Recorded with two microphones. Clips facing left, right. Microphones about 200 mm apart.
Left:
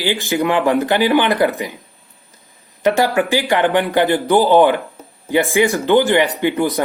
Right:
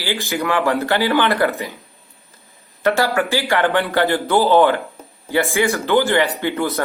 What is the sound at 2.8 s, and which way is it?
A man's voice, 15° left (ahead or behind).